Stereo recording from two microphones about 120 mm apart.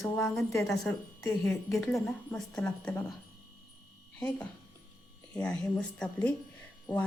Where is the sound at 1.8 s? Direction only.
5° left (ahead or behind).